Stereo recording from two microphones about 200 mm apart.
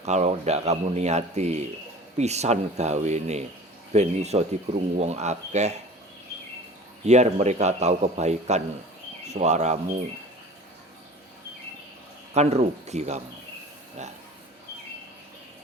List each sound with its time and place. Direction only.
0.0 s speech: 35° right (ahead or behind)
7.1 s speech: 35° right (ahead or behind)
12.3 s speech: 35° right (ahead or behind)